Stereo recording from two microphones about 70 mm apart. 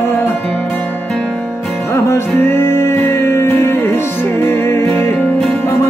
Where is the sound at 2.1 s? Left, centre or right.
Left.